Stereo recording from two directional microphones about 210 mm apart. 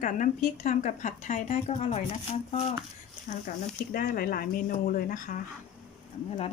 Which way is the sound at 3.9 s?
45° left (ahead or behind).